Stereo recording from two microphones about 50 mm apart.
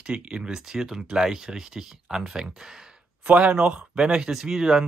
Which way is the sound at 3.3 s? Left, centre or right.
Right.